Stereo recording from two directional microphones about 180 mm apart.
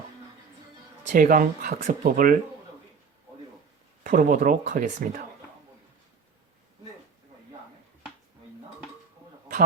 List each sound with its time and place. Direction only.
1.0 s speech: 45° right (ahead or behind)
4.0 s speech: 45° right (ahead or behind)